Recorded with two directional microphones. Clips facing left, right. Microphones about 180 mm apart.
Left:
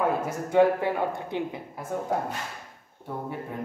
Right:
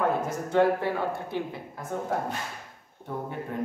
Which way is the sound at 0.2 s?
10° left (ahead or behind).